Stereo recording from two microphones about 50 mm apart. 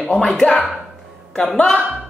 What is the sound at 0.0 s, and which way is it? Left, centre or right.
A woman's voice, centre.